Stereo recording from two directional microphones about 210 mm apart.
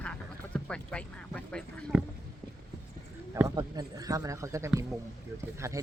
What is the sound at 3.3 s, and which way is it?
Speech, 15° right (ahead or behind).